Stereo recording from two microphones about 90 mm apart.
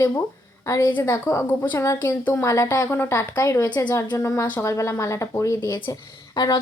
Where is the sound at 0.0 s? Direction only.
30° left (ahead or behind).